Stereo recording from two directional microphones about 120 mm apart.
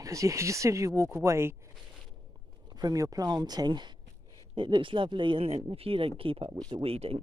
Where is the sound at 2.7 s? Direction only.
30° right (ahead or behind); by 7.2 s 55° right (ahead or behind).